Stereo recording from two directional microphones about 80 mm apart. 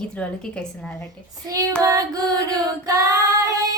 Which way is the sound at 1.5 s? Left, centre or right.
Right.